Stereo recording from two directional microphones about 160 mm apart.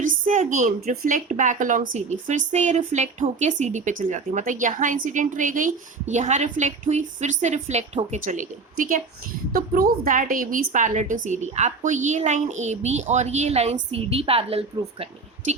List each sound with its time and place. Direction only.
0.3 s a woman's voice: 50° right (ahead or behind)
9.5 s a woman's voice: 65° right (ahead or behind)
10.0 s a woman's voice: 55° right (ahead or behind); by 15.0 s 35° right (ahead or behind)